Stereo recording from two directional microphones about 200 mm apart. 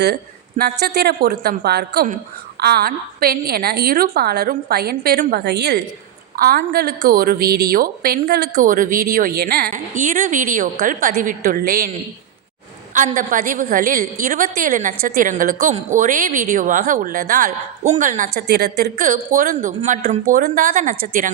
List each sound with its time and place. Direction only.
0.6 s a woman's voice: 55° right (ahead or behind)
8.5 s a woman's voice: 40° right (ahead or behind)
12.9 s a woman's voice: 40° right (ahead or behind)